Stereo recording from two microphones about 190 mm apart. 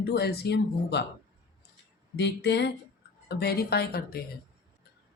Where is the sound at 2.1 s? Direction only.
65° left (ahead or behind).